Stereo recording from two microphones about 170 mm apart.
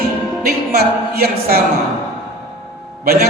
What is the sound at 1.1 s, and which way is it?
Speech, 65° right (ahead or behind).